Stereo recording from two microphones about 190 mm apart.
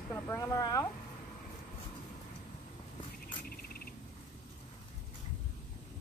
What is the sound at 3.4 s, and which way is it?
Mouse, 50° left (ahead or behind).